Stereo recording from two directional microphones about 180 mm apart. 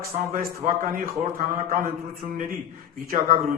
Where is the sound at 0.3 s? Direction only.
50° right (ahead or behind).